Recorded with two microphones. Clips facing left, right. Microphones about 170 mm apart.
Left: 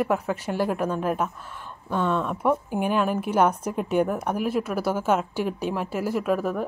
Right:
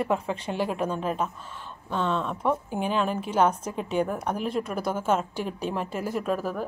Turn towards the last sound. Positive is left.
turn(degrees=0)  # may be behind; listen again after turning